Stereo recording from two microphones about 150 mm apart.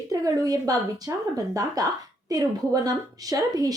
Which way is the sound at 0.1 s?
25° right (ahead or behind).